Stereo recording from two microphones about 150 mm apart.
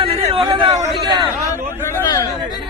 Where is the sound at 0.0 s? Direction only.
40° right (ahead or behind).